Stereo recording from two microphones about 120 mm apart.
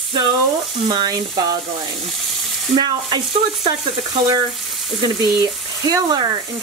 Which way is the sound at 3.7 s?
40° right (ahead or behind).